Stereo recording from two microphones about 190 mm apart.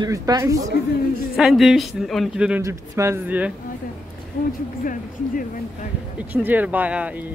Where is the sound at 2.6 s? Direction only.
15° right (ahead or behind).